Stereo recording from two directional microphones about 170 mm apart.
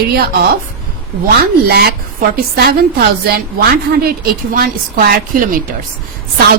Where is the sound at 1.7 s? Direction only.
65° right (ahead or behind).